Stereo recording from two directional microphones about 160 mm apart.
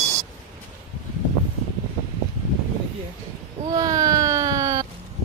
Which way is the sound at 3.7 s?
20° right (ahead or behind).